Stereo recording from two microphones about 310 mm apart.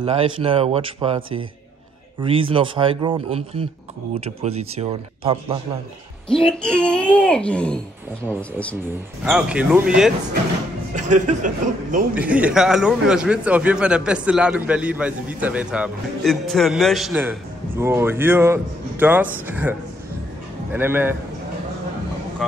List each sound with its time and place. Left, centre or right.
0.0 s speech: centre
4.4 s speech: centre
6.4 s a man's voice: centre
11.0 s speech: right
12.1 s a man's voice: centre
20.7 s speech: centre